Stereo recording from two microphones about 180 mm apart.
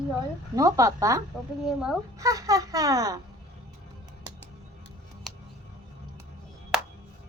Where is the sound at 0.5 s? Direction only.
20° right (ahead or behind).